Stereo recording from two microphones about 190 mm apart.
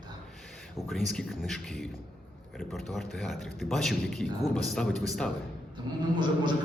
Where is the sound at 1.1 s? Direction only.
Centre (ahead or behind).